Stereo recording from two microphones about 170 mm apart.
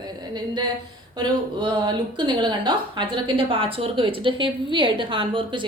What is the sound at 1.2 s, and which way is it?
A woman's voice, 30° right (ahead or behind).